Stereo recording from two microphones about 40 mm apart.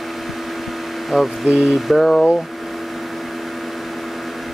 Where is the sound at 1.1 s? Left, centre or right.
Centre.